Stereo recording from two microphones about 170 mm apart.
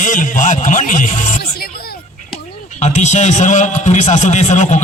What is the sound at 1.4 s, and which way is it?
Music, 65° left (ahead or behind).